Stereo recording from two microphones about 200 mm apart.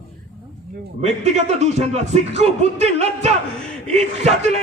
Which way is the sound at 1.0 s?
35° right (ahead or behind).